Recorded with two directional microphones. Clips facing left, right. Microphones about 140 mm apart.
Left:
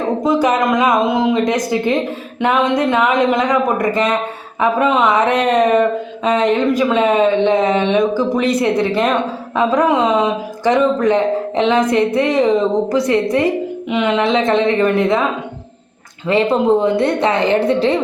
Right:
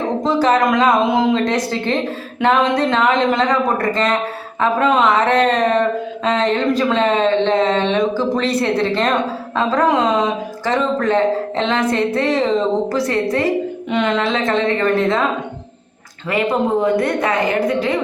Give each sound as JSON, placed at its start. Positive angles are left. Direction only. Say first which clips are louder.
{"t": 0.2, "sound": "speech", "louder": "right 1 dB", "side_deg": 10}
{"t": 1.5, "sound": "speech", "louder": "left 3 dB", "side_deg": 15}
{"t": 10.6, "sound": "a woman's voice", "louder": "left 5 dB", "side_deg": 15}
{"t": 13.9, "sound": "a woman's voice", "louder": "left 3 dB", "side_deg": 10}
{"t": 16.2, "sound": "a woman's voice", "louder": "left 4 dB", "side_deg": 25}